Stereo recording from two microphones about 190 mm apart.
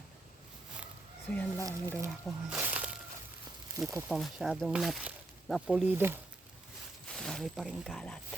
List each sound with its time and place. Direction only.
1.3 s speech: 10° left (ahead or behind)
2.0 s speech: centre (ahead or behind)